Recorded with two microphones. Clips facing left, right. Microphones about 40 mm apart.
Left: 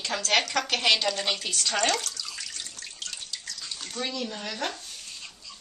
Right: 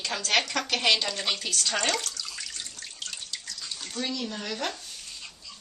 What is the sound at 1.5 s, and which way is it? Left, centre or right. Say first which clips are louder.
Water: left 2 dB; centre.